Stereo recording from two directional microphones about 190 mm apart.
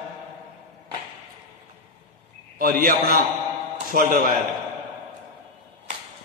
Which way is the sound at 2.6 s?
45° right (ahead or behind).